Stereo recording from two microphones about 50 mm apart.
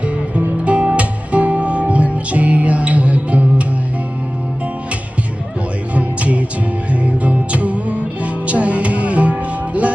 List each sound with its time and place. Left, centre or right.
0.0 s music: right
5.9 s music: right